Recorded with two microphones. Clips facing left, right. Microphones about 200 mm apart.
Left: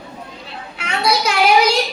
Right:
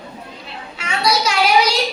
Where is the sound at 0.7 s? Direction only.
55° left (ahead or behind).